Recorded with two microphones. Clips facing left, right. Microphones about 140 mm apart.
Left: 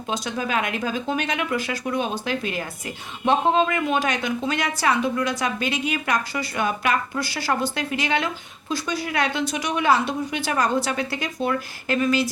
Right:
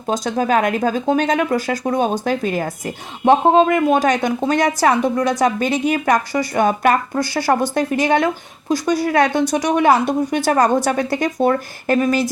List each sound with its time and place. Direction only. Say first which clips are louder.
0.1 s a woman's voice: right 8 dB; 45° right (ahead or behind)